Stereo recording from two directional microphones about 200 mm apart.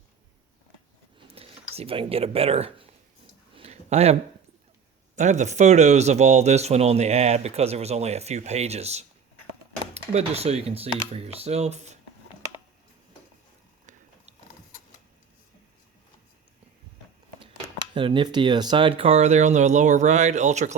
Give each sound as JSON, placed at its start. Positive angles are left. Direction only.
{"t": 1.3, "sound": "speech", "side_deg": -30}
{"t": 3.5, "sound": "a sound", "side_deg": -30}
{"t": 5.1, "sound": "speech", "side_deg": -35}
{"t": 17.4, "sound": "speech", "side_deg": -25}